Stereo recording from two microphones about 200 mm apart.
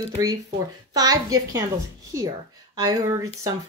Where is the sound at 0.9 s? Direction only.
20° right (ahead or behind).